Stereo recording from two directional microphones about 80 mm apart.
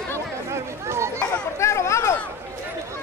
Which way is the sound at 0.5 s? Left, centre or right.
Right.